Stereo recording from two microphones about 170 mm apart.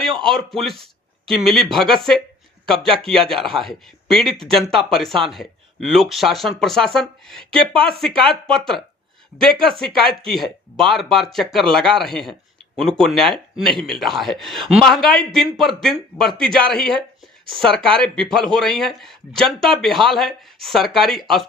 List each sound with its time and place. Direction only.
0.0 s a man's voice: centre (ahead or behind)
2.8 s speech: 30° right (ahead or behind)
3.1 s a man's voice: centre (ahead or behind)
7.6 s speech: 30° right (ahead or behind)
8.3 s a man's voice: 5° left (ahead or behind)